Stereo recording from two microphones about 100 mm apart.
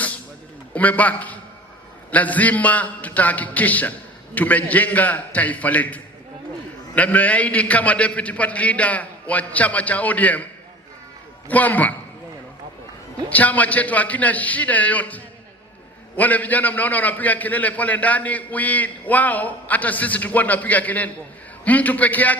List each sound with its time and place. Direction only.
0.7 s a man's voice: 15° left (ahead or behind)
11.4 s a man's voice: 15° left (ahead or behind)
13.3 s a man's voice: 15° left (ahead or behind)